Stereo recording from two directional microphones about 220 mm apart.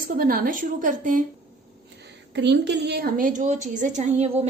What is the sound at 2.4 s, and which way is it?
A woman's voice, 50° right (ahead or behind).